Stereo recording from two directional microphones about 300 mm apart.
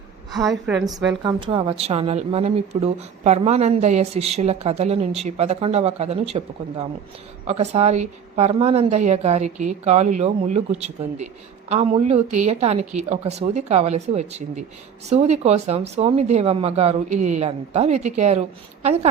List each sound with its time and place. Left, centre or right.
0.4 s a woman's voice: centre
1.2 s speech: centre